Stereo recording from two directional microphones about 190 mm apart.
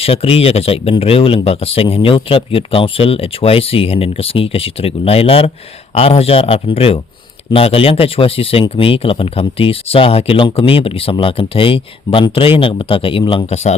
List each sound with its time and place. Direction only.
0.0 s speech: 30° left (ahead or behind)